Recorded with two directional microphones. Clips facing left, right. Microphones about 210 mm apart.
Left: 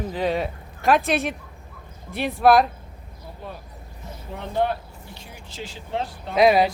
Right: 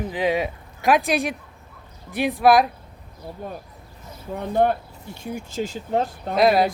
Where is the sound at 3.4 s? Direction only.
45° right (ahead or behind).